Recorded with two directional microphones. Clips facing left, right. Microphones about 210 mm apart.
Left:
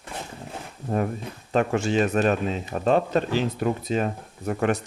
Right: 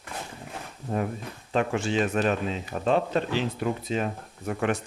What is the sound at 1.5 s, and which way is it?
Speech, 45° left (ahead or behind).